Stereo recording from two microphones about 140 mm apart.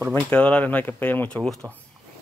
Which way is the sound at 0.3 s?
10° left (ahead or behind).